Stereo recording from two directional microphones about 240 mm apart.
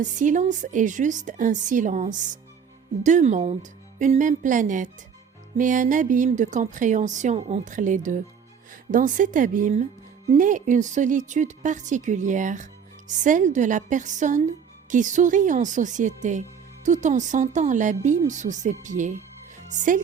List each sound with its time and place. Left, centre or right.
0.0 s speech: right